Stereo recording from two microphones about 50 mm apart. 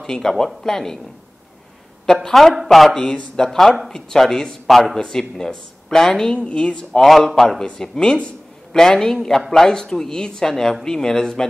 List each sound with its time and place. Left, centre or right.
0.0 s speech: centre
2.2 s speech: centre
3.1 s speech: centre
3.4 s speech: centre
6.3 s speech: left
7.1 s speech: centre